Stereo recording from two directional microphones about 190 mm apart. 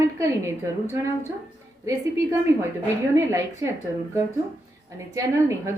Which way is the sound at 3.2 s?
15° right (ahead or behind).